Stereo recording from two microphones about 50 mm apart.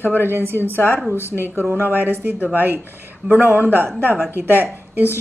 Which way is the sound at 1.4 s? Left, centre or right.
Right.